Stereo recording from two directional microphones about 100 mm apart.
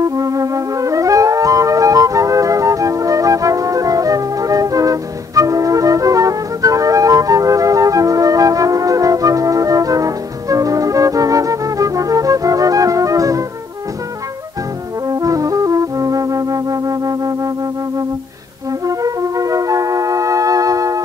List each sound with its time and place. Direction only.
0.0 s flute: 35° right (ahead or behind)
15.0 s music: 35° right (ahead or behind)
18.9 s flute: 35° right (ahead or behind)